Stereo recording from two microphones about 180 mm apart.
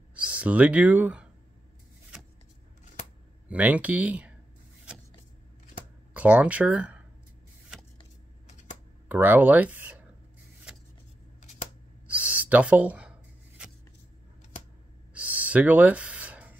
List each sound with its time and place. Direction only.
0.1 s speech: 5° right (ahead or behind)
3.4 s speech: 5° right (ahead or behind)
6.1 s speech: 5° right (ahead or behind)
8.5 s typewriter: 40° left (ahead or behind)
9.1 s speech: 10° right (ahead or behind)
12.1 s a sound: 10° right (ahead or behind)
15.1 s a sound: 10° right (ahead or behind)